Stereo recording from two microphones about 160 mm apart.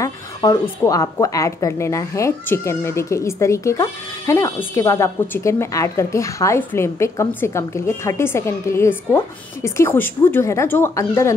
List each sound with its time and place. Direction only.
0.0 s a woman's voice: 20° left (ahead or behind)